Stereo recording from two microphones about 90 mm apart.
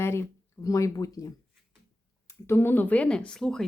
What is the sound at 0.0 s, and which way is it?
Speech, 30° left (ahead or behind).